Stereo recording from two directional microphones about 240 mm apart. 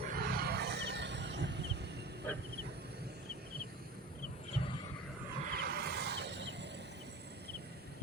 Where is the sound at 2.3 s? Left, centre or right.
Centre.